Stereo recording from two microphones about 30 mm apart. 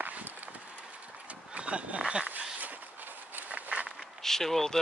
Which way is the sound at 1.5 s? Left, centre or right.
Right.